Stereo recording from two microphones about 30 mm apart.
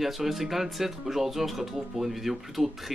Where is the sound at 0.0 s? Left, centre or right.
Centre.